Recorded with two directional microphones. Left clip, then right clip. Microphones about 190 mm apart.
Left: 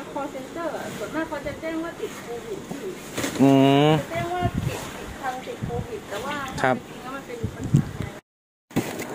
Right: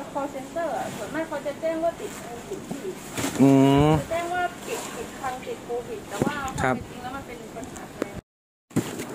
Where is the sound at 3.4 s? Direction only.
20° right (ahead or behind).